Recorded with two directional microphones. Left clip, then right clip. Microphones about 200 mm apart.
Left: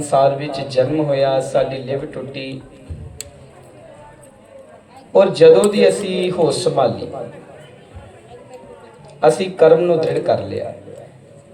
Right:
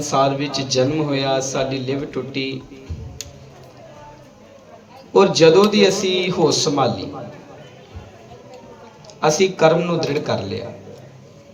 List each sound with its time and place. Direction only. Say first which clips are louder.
0.0 s a man's voice: left 3 dB; 30° right (ahead or behind)
5.1 s a man's voice: left 3 dB; 30° right (ahead or behind)
9.2 s a man's voice: left 3 dB; 30° right (ahead or behind)